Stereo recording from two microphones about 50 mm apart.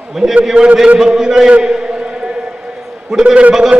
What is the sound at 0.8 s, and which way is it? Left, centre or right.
Speech, centre.